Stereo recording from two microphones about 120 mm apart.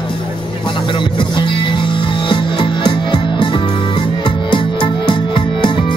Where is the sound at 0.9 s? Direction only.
40° left (ahead or behind).